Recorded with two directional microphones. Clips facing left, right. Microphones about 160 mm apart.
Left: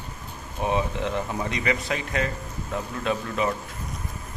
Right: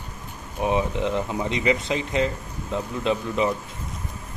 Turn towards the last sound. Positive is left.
turn(degrees=-20)  # may be behind; listen again after turning